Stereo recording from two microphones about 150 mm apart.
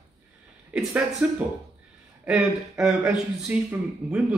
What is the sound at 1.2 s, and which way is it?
Speech, 10° right (ahead or behind).